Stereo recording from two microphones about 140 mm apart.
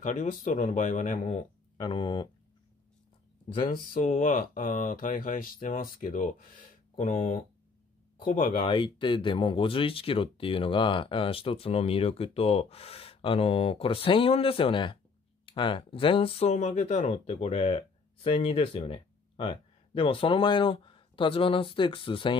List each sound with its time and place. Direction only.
0.0 s speech: 70° left (ahead or behind)
1.3 s speech: 35° left (ahead or behind)
3.6 s speech: 80° left
8.6 s speech: 35° left (ahead or behind); by 17.0 s 60° left (ahead or behind)
17.0 s speech: 40° left (ahead or behind)